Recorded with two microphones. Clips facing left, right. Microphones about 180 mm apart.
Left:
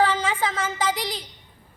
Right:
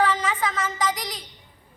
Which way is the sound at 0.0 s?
30° left (ahead or behind).